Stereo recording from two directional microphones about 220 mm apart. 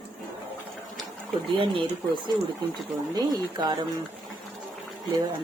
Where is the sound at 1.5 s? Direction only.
25° right (ahead or behind).